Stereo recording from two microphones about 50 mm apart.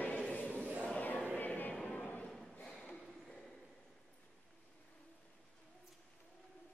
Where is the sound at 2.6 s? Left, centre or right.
Centre.